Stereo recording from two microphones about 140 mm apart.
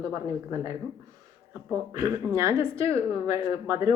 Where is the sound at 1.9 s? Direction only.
25° right (ahead or behind).